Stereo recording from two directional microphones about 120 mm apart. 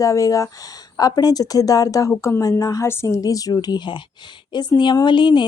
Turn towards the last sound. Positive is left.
turn(degrees=40)  # may be behind; listen again after turning